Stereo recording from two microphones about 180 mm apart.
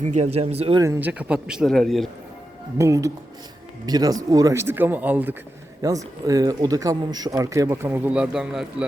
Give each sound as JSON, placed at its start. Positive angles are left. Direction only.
{"t": 0.0, "sound": "speech", "side_deg": -40}
{"t": 0.8, "sound": "speech", "side_deg": -10}
{"t": 2.7, "sound": "speech", "side_deg": -15}